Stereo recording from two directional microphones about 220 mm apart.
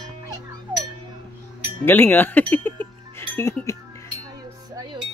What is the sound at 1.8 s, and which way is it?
Speech, 10° left (ahead or behind).